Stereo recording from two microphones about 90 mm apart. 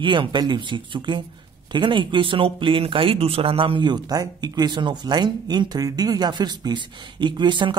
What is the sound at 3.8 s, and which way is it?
Speech, 50° right (ahead or behind).